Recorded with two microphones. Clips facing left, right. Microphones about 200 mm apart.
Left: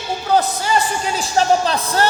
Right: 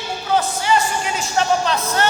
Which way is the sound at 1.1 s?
35° left (ahead or behind).